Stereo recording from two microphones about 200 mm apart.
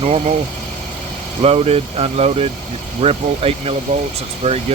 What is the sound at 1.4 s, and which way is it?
Speech, 30° right (ahead or behind).